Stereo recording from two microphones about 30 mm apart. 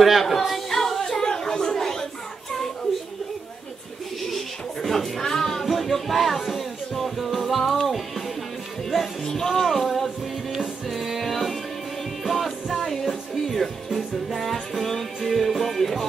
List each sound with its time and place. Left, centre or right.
0.0 s singing: centre
0.7 s a sound: centre
4.8 s music: centre
5.7 s music: centre
9.2 s music: centre
10.9 s music: centre